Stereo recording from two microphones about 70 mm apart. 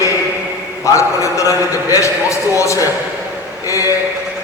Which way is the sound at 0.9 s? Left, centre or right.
Left.